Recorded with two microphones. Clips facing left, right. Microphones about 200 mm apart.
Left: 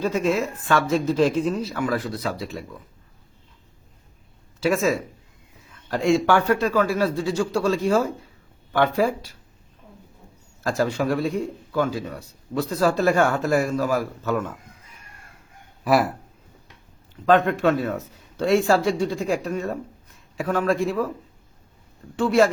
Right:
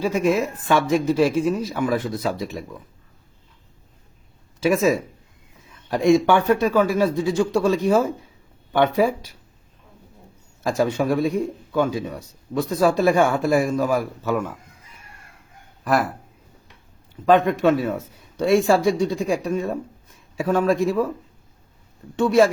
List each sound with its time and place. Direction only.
0.0 s speech: 15° right (ahead or behind)
4.6 s a man's voice: 20° right (ahead or behind)
6.4 s a man's voice: 20° right (ahead or behind)
10.6 s speech: 15° right (ahead or behind)
15.8 s speech: 5° left (ahead or behind)
17.2 s speech: 15° right (ahead or behind)
20.5 s a man's voice: 25° right (ahead or behind)